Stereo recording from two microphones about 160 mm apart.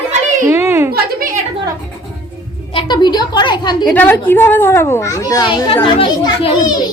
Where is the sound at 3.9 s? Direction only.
10° left (ahead or behind); by 6.5 s 35° left (ahead or behind).